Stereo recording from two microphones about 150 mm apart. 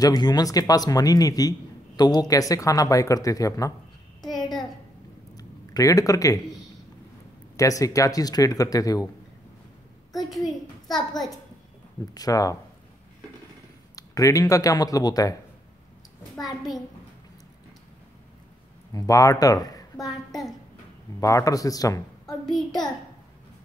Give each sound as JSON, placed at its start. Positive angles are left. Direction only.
{"t": 0.0, "sound": "speech", "side_deg": 25}
{"t": 4.2, "sound": "a sound", "side_deg": 0}
{"t": 5.4, "sound": "speech", "side_deg": 25}
{"t": 7.5, "sound": "speech", "side_deg": 20}
{"t": 10.4, "sound": "a sound", "side_deg": 25}
{"t": 12.1, "sound": "speech", "side_deg": 25}
{"t": 13.9, "sound": "speech", "side_deg": 25}
{"t": 18.9, "sound": "speech", "side_deg": 25}
{"t": 21.2, "sound": "speech", "side_deg": 25}
{"t": 22.2, "sound": "a child's voice", "side_deg": 0}